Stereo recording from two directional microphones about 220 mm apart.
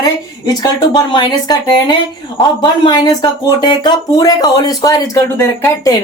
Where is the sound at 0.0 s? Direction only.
15° left (ahead or behind).